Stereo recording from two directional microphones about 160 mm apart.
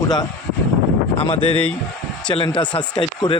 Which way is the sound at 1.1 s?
40° left (ahead or behind).